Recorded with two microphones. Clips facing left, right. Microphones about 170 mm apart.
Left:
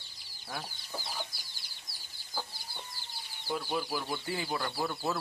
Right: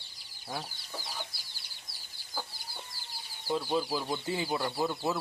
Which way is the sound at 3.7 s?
20° right (ahead or behind).